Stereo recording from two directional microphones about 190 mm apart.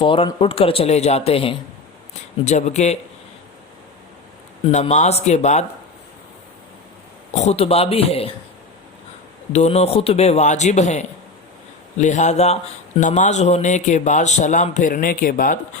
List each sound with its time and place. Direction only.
0.0 s a man's voice: 30° left (ahead or behind)
4.6 s a man's voice: 35° left (ahead or behind)
7.3 s a man's voice: 35° left (ahead or behind)
9.5 s a man's voice: 35° left (ahead or behind)